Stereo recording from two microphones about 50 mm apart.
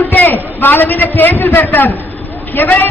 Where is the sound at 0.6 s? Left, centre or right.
Left.